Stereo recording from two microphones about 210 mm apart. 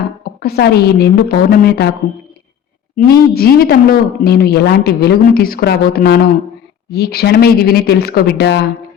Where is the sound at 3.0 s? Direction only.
45° left (ahead or behind).